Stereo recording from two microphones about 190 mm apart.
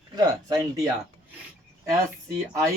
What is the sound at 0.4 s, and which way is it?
Speech, 20° right (ahead or behind).